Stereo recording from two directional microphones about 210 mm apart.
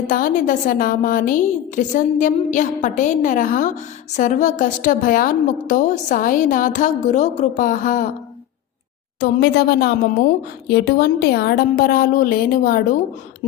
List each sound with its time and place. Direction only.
0.1 s a woman's voice: 40° left (ahead or behind)
9.2 s a woman's voice: 50° left (ahead or behind)